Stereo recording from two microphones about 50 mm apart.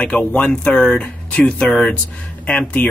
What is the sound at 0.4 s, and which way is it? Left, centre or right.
Speech, centre.